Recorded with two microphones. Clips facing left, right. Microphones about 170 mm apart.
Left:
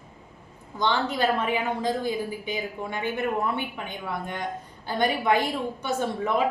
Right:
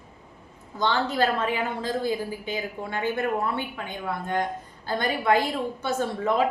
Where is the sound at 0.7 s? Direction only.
15° left (ahead or behind).